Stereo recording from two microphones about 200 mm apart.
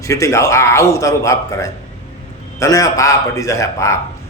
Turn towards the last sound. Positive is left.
turn(degrees=15)  # may be behind; listen again after turning